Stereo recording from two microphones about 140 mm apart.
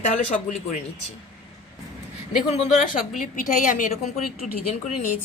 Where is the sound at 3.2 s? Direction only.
70° left (ahead or behind).